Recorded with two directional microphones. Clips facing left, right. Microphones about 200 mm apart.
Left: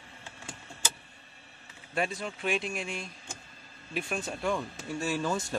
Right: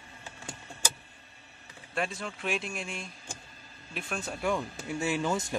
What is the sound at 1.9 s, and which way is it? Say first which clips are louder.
Speech: left 2 dB; 5° left (ahead or behind).